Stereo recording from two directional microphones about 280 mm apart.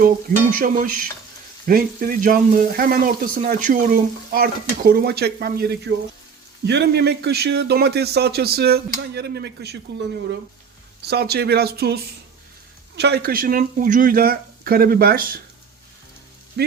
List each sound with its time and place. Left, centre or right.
0.5 s stir: right
1.6 s speech: right
11.0 s speech: right
16.6 s speech: right